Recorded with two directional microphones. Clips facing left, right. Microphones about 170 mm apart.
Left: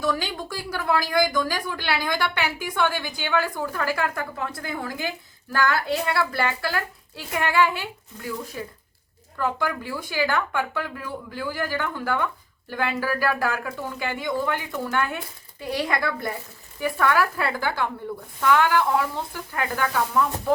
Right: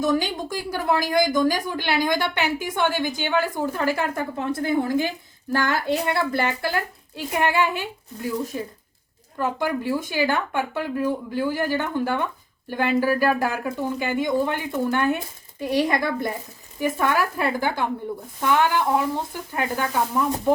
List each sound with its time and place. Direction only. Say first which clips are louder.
0.0 s speech: right 4 dB; 20° right (ahead or behind)